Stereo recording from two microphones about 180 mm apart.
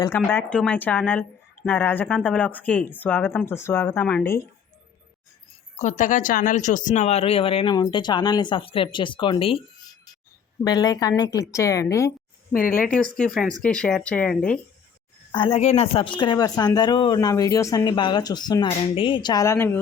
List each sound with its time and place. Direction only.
0.2 s a woman's voice: 5° left (ahead or behind)
5.8 s speech: 45° left (ahead or behind)
10.6 s a woman's voice: 20° left (ahead or behind)
15.3 s speech: 30° left (ahead or behind); by 19.8 s 10° left (ahead or behind)